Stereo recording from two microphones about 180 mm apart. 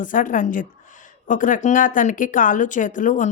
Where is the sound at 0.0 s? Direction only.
45° left (ahead or behind).